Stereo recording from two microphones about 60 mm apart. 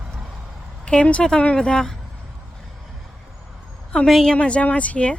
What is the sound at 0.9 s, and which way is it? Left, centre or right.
Speech, centre.